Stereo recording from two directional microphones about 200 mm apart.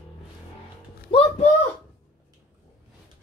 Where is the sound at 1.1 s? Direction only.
25° left (ahead or behind).